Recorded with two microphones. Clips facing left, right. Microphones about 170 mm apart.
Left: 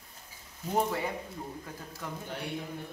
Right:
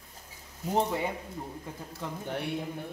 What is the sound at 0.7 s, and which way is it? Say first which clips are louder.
Speech: right 2 dB; 20° right (ahead or behind).